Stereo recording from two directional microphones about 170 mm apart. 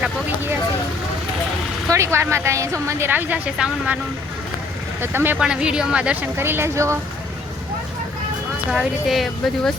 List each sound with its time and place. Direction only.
1.9 s a woman's voice: 15° right (ahead or behind)
4.9 s a woman's voice: 15° right (ahead or behind)
8.7 s speech: centre (ahead or behind)